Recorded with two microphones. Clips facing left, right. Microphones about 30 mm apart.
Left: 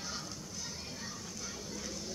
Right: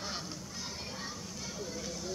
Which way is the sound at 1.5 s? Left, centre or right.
Centre.